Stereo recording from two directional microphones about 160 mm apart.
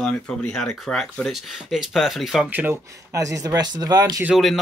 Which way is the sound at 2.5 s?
15° right (ahead or behind).